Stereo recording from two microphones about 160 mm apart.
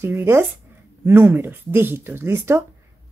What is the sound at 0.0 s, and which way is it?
Speech, 15° right (ahead or behind).